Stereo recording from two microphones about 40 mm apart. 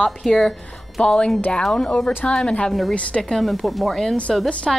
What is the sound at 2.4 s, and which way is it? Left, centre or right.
Speech, left.